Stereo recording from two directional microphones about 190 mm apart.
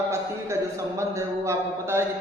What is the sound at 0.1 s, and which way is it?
A man's voice, 15° right (ahead or behind).